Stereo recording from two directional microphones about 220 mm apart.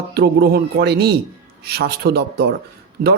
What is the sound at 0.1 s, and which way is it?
Speech, 45° right (ahead or behind).